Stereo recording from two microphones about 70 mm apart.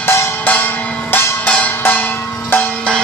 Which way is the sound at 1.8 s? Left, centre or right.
Left.